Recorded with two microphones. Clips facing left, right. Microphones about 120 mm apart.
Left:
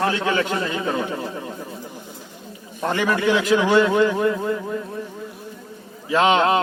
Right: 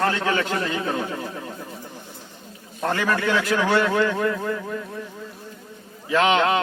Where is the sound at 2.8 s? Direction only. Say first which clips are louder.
Left 2 dB; 15° left (ahead or behind).